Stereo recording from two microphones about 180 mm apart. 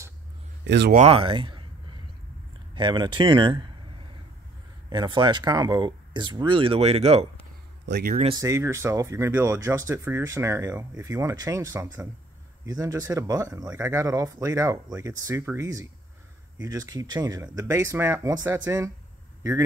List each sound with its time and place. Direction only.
0.7 s speech: 75° right (ahead or behind)
0.9 s speech: 35° right (ahead or behind)
2.7 s speech: 25° right (ahead or behind)
4.8 s speech: 25° right (ahead or behind)
7.8 s a man's voice: 65° right (ahead or behind)
8.3 s speech: 15° right (ahead or behind)